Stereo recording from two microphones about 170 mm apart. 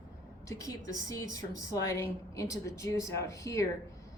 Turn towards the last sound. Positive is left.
turn(degrees=20)  # may be behind; listen again after turning